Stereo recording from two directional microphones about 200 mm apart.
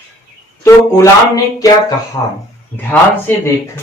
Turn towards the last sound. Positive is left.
turn(degrees=10)  # may be behind; listen again after turning